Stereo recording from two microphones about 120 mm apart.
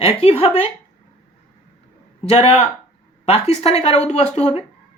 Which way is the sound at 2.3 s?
60° left (ahead or behind).